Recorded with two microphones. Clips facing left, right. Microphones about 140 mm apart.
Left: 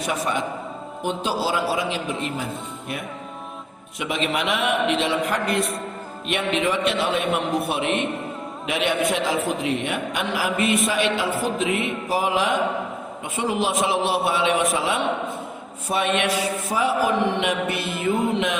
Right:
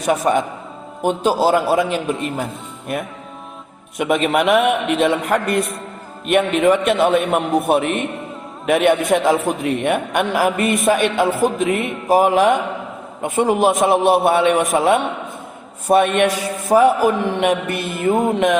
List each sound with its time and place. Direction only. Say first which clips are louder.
0.0 s a man's voice: right 8 dB; 50° right (ahead or behind)
3.9 s a man's voice: right 8 dB; 50° right (ahead or behind)